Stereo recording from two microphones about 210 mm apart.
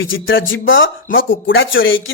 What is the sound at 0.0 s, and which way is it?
Speech, 65° left (ahead or behind).